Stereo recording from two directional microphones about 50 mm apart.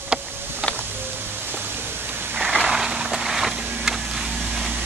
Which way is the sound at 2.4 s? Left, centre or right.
Centre.